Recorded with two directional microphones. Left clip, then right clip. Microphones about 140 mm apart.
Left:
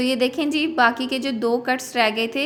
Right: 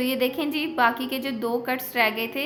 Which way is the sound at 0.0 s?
35° left (ahead or behind).